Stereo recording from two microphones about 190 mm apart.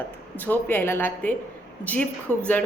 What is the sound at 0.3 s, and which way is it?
A woman's voice, 10° left (ahead or behind).